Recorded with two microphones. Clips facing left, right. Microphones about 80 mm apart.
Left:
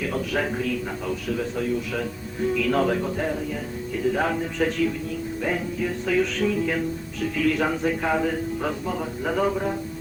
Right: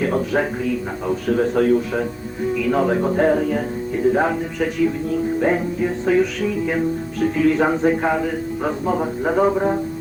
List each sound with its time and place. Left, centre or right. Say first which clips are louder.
0.6 s a man's voice: right 4 dB; centre
1.3 s a man's voice: right 11 dB; right
2.4 s a man's voice: right 3 dB; centre
3.0 s a man's voice: right 9 dB; right
3.2 s music: right 10 dB; right
3.9 s a man's voice: right 6 dB; right
5.1 s a man's voice: right 9 dB; right
5.8 s speech: right 5 dB; right
7.3 s a man's voice: right 5 dB; right